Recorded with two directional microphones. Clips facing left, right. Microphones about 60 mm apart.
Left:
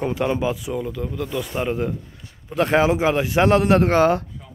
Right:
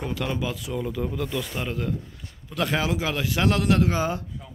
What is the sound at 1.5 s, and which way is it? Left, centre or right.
Speech, left.